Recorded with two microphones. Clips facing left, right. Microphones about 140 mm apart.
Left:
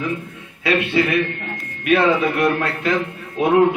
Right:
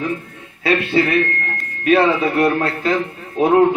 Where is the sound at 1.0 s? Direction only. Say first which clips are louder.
Right 2 dB; 35° right (ahead or behind).